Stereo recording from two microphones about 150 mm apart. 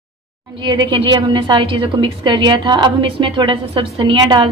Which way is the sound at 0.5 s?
30° right (ahead or behind).